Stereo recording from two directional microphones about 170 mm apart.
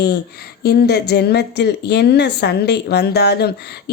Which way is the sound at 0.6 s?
70° left (ahead or behind).